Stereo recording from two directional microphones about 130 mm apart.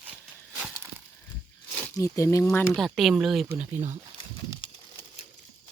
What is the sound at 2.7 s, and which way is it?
Speech, centre (ahead or behind).